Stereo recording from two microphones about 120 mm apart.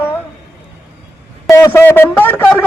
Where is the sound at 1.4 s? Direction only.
25° left (ahead or behind).